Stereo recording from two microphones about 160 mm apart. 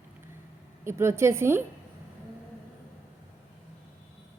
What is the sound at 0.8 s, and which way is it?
Speech, 15° right (ahead or behind).